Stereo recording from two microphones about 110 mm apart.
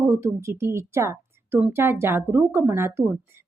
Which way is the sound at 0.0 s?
25° right (ahead or behind).